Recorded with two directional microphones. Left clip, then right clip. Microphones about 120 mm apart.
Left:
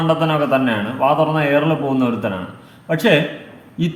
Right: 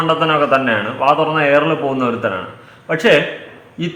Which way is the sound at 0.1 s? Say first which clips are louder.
Right 2 dB; 15° left (ahead or behind).